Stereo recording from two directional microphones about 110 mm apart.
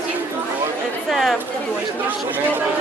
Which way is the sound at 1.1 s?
Centre (ahead or behind).